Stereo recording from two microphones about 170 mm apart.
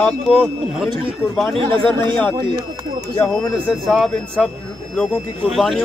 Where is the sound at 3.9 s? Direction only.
Centre (ahead or behind).